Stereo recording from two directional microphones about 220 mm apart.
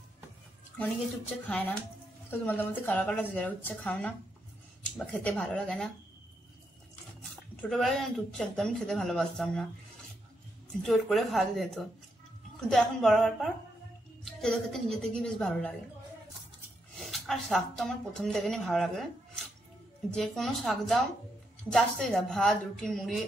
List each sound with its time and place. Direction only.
1.5 s a woman's voice: 5° left (ahead or behind)
7.7 s speech: centre (ahead or behind)
10.8 s speech: centre (ahead or behind)
17.0 s speech: centre (ahead or behind)